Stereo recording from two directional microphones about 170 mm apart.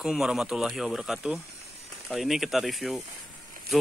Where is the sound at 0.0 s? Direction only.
Centre (ahead or behind).